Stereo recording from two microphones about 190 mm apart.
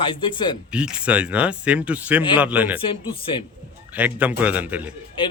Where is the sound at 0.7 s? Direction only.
5° right (ahead or behind).